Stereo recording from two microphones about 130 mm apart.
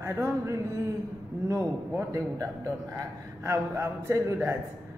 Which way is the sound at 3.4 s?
20° right (ahead or behind).